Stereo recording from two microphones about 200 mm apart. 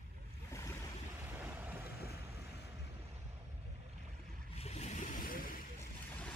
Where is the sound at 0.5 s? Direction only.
15° left (ahead or behind).